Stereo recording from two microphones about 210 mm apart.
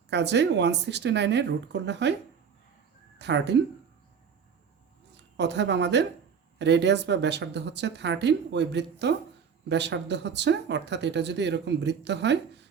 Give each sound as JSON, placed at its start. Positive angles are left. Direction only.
{"t": 0.1, "sound": "speech", "side_deg": -55}
{"t": 3.2, "sound": "speech", "side_deg": -55}
{"t": 5.1, "sound": "a woman's voice", "side_deg": -55}